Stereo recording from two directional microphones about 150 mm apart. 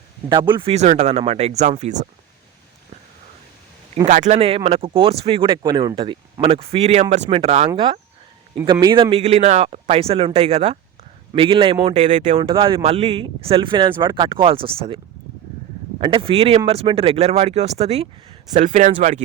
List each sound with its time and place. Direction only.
0.3 s speech: 30° right (ahead or behind)
0.7 s speech: 50° right (ahead or behind)
4.0 s speech: 50° right (ahead or behind)
8.5 s speech: 30° right (ahead or behind); by 12.2 s 45° right (ahead or behind)
12.4 s speech: 35° right (ahead or behind); by 19.2 s 55° right (ahead or behind)